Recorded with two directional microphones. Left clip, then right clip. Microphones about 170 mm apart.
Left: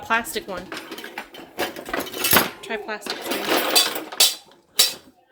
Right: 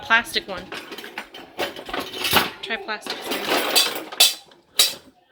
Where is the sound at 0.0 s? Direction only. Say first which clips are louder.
Right 4 dB; 15° left (ahead or behind).